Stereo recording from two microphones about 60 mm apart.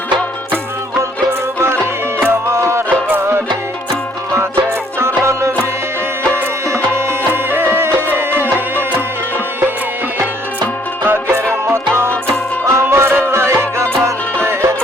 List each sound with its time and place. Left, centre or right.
1.5 s music: right
4.9 s music: right
11.0 s music: right